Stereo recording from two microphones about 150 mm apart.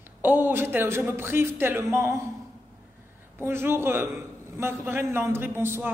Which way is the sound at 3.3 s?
15° right (ahead or behind).